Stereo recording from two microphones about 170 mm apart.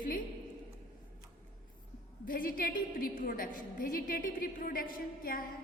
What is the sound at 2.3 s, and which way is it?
A woman's voice, 55° left (ahead or behind).